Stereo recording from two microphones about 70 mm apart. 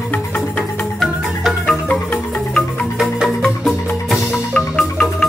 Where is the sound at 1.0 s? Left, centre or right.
Centre.